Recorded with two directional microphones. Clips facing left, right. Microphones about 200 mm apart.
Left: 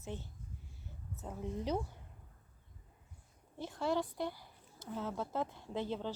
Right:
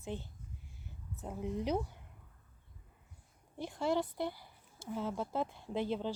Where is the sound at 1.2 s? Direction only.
15° right (ahead or behind).